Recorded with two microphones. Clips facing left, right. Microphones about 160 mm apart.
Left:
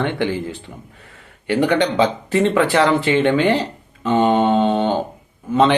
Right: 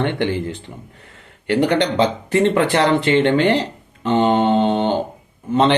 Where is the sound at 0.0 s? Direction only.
60° right (ahead or behind).